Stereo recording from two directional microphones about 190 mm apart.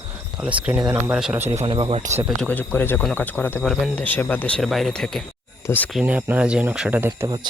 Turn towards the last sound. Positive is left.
turn(degrees=-15)  # may be behind; listen again after turning